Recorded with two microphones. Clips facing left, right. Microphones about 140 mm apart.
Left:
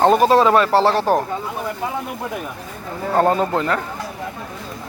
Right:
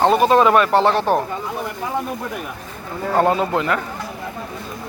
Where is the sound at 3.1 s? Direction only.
5° right (ahead or behind).